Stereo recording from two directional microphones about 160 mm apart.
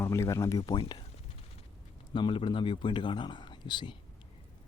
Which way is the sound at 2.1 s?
30° left (ahead or behind).